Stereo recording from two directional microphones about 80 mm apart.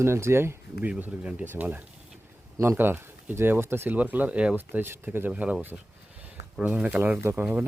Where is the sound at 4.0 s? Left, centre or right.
Centre.